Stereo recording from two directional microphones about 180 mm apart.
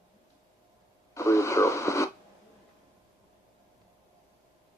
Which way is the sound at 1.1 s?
15° left (ahead or behind).